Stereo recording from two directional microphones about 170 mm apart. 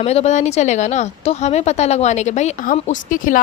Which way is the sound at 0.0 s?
40° left (ahead or behind).